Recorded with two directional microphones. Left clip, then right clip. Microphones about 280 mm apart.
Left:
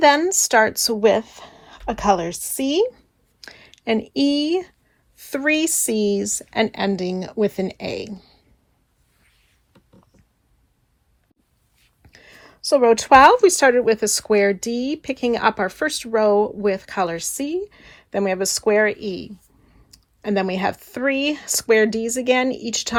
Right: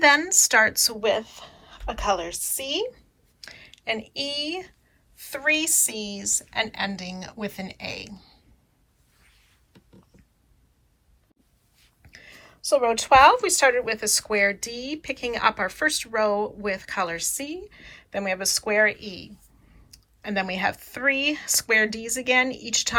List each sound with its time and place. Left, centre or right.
0.0 s a woman's voice: centre
12.0 s speech: centre